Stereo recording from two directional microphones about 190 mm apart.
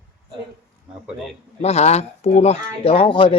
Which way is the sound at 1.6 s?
35° left (ahead or behind).